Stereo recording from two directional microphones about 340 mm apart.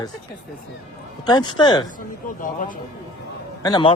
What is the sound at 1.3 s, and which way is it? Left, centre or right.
Speech, centre.